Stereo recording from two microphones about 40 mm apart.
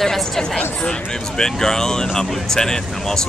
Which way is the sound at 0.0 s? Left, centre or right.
Centre.